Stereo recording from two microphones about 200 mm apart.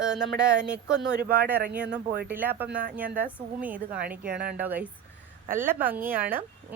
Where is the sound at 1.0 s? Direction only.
55° right (ahead or behind).